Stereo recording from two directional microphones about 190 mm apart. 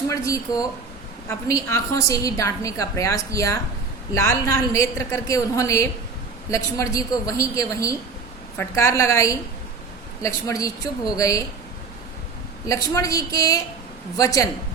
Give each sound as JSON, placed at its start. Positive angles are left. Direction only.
{"t": 0.1, "sound": "a woman's voice", "side_deg": 20}
{"t": 12.6, "sound": "a woman's voice", "side_deg": 15}